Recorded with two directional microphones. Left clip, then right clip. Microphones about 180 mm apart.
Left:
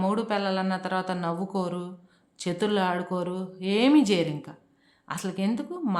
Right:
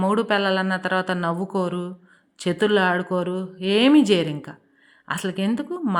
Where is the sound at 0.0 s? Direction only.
25° right (ahead or behind).